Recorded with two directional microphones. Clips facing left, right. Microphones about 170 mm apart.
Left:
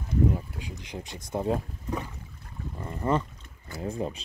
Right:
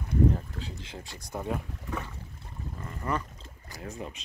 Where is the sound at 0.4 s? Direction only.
10° left (ahead or behind).